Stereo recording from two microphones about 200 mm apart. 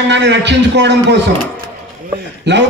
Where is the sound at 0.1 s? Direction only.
60° right (ahead or behind).